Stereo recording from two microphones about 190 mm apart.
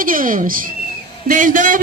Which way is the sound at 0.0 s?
45° right (ahead or behind).